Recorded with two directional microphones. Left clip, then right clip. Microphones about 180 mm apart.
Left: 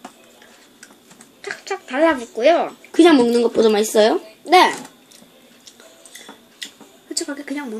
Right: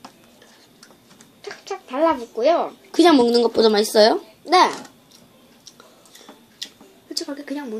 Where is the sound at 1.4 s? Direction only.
10° left (ahead or behind).